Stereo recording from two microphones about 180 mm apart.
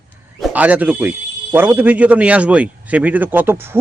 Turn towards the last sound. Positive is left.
turn(degrees=-15)  # may be behind; listen again after turning